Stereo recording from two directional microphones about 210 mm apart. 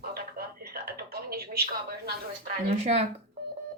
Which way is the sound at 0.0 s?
45° right (ahead or behind).